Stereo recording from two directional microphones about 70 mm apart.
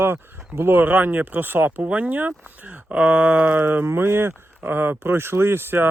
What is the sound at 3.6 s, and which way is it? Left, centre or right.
Speech, right.